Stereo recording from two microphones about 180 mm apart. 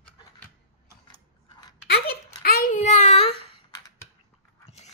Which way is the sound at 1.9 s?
60° left (ahead or behind).